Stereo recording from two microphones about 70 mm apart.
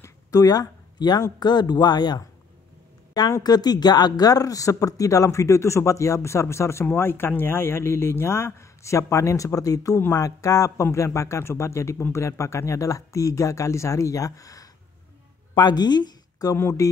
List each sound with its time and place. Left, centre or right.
0.3 s speech: left
3.4 s speech: left
15.6 s speech: left
16.8 s speech: left